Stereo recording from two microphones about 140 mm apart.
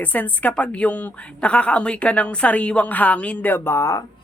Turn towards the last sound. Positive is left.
turn(degrees=20)  # may be behind; listen again after turning